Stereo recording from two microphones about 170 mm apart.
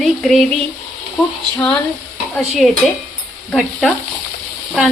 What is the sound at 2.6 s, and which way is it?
A woman's voice, centre (ahead or behind).